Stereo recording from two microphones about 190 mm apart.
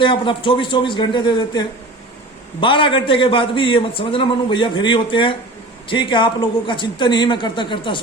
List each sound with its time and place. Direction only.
0.0 s a man's voice: 25° left (ahead or behind)